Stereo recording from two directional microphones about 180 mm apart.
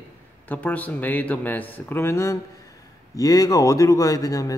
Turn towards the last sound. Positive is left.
turn(degrees=20)  # may be behind; listen again after turning